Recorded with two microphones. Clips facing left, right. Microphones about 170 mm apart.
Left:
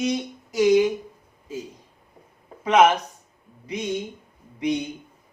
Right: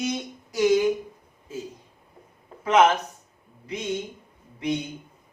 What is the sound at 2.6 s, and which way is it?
Speech, 15° left (ahead or behind).